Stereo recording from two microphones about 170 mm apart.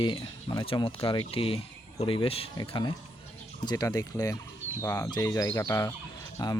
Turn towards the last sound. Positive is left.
turn(degrees=20)  # may be behind; listen again after turning